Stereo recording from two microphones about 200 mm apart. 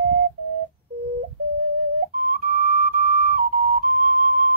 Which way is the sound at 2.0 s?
45° right (ahead or behind).